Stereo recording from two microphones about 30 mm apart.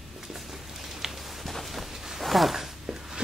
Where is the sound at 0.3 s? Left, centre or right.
Centre.